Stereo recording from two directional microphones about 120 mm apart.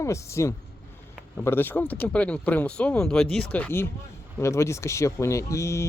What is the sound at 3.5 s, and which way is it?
Speech, 15° left (ahead or behind).